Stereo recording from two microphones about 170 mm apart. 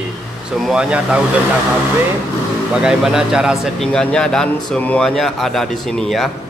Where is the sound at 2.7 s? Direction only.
5° right (ahead or behind).